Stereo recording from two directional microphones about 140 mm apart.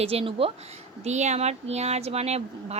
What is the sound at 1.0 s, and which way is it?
Speech, 55° right (ahead or behind).